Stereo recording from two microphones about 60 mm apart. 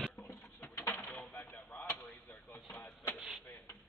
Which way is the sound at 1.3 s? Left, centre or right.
Left.